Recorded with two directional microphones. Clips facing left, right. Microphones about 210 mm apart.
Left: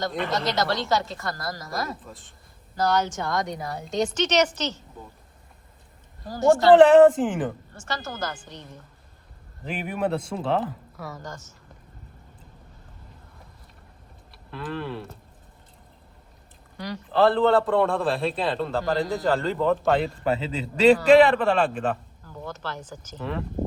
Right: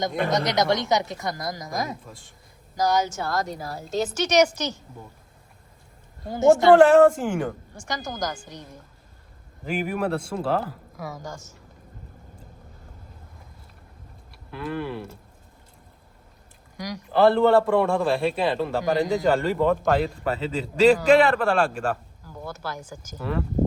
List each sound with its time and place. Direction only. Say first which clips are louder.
0.3 s speech: right 4 dB; 20° right (ahead or behind)
6.2 s speech: right 2 dB; 20° right (ahead or behind)
6.7 s a man's voice: left 1 dB; centre (ahead or behind)
7.7 s a man's voice: right 1 dB; 15° right (ahead or behind)
14.5 s a man's voice: right 2 dB; 5° right (ahead or behind)
16.7 s speech: right 1 dB; 10° right (ahead or behind)
17.7 s a man's voice: right 1 dB; centre (ahead or behind)
21.3 s speech: even; 5° right (ahead or behind)